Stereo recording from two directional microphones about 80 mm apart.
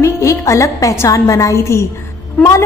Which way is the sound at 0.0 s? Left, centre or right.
Left.